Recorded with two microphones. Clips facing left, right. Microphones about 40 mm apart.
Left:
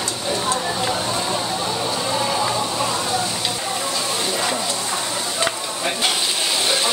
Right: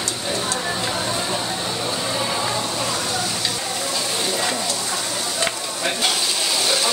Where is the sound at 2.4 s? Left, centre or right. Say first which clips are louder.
Left 2 dB; left.